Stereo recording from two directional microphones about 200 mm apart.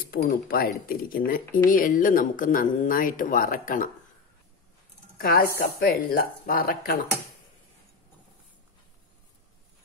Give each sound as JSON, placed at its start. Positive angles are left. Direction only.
{"t": 0.2, "sound": "speech", "side_deg": 45}
{"t": 5.1, "sound": "speech", "side_deg": 50}